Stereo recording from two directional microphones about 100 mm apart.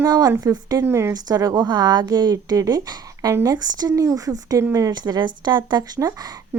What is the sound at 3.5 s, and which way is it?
A woman's voice, 40° right (ahead or behind).